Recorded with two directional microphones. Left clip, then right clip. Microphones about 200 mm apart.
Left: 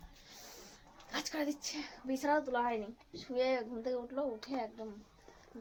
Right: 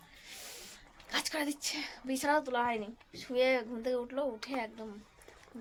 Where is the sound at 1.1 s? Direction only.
30° right (ahead or behind).